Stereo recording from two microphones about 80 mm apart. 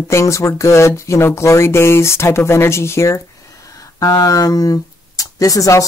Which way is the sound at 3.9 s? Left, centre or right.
Left.